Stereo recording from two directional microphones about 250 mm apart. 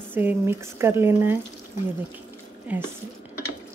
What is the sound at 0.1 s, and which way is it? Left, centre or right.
Speech, centre.